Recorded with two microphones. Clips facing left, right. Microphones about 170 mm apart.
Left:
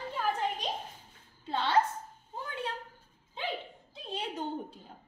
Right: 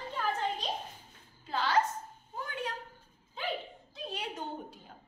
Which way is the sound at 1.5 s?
30° left (ahead or behind).